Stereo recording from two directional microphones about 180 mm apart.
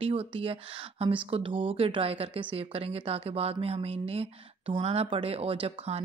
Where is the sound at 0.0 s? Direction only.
30° right (ahead or behind).